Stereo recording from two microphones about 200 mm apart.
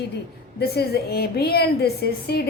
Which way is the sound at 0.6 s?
55° left (ahead or behind).